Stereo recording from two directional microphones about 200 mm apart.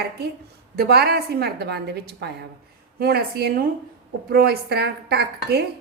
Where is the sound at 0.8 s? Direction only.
50° right (ahead or behind).